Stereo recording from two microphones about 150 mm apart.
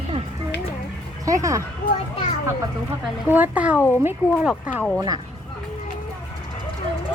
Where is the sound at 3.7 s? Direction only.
15° left (ahead or behind).